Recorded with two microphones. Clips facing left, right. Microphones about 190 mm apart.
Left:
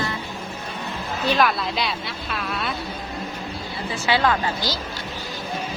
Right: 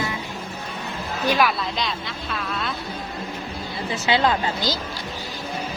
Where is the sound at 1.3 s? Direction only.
10° right (ahead or behind).